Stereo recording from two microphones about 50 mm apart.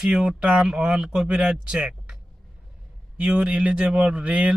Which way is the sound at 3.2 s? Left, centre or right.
Centre.